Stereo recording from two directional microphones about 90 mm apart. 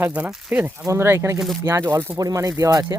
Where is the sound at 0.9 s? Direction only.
30° right (ahead or behind).